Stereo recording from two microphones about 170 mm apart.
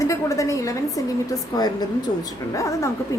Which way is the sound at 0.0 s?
20° left (ahead or behind).